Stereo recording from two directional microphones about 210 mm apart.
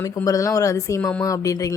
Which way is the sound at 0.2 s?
15° left (ahead or behind).